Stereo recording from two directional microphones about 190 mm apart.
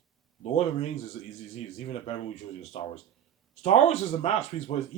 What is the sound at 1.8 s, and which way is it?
Speech, 35° left (ahead or behind).